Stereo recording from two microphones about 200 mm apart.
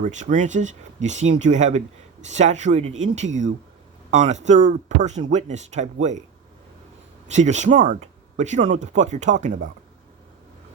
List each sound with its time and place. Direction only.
0.0 s speech: 40° right (ahead or behind)
7.3 s speech: 35° right (ahead or behind)